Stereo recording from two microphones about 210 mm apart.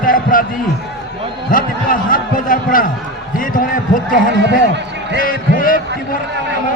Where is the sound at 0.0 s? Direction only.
40° left (ahead or behind).